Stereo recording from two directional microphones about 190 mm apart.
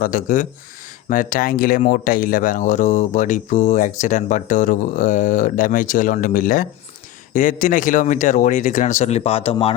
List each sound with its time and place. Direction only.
0.0 s speech: 45° left (ahead or behind)